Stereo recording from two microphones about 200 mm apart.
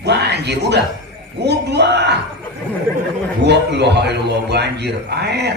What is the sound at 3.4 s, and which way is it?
A man's voice, 55° right (ahead or behind).